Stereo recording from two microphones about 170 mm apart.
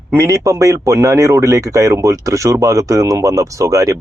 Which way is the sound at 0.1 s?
20° right (ahead or behind).